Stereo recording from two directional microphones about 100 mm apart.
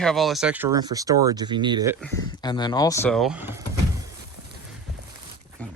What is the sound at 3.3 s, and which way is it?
Speech, 20° right (ahead or behind).